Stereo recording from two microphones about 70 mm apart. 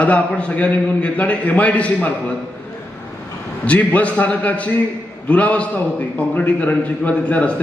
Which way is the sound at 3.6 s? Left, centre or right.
Left.